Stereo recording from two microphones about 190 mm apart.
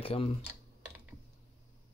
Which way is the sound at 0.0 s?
30° left (ahead or behind).